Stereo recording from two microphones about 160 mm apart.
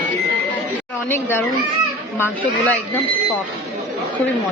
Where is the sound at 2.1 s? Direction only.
15° left (ahead or behind).